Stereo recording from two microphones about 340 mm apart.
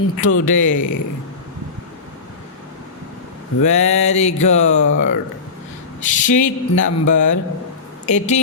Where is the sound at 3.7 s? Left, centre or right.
Centre.